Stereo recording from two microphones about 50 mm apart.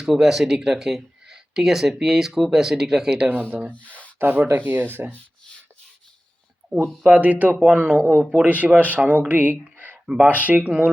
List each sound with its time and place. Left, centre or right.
0.0 s speech: centre
3.7 s speech: left
4.2 s speech: right
7.0 s speech: right